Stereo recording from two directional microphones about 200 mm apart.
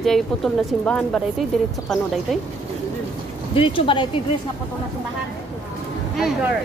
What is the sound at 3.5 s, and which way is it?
Speech, 25° left (ahead or behind).